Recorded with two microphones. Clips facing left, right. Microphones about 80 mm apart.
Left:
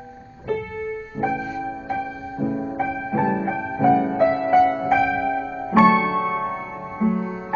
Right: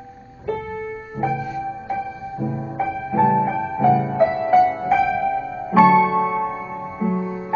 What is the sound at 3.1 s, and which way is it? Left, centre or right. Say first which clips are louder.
Music: right 7 dB; centre.